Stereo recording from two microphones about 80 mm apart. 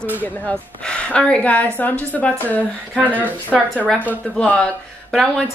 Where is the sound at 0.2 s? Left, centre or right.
Centre.